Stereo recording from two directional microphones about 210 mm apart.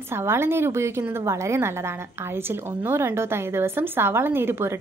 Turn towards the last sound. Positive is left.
turn(degrees=-10)  # may be behind; listen again after turning